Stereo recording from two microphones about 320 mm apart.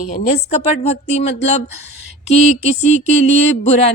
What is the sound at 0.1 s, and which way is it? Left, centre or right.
Speech, left.